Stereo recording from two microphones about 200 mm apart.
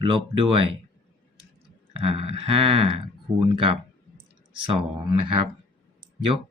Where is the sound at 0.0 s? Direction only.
25° right (ahead or behind).